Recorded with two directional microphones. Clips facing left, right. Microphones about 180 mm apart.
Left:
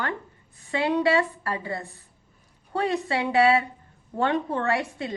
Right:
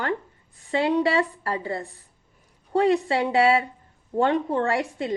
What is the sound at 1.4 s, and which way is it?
Speech, 30° right (ahead or behind).